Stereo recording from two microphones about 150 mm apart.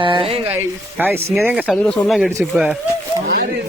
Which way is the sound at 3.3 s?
90° right.